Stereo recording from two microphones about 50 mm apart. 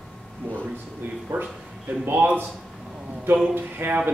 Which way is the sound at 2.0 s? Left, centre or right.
Right.